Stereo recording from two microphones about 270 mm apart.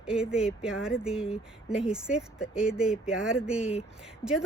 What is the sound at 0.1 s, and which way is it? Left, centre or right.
A woman's voice, centre.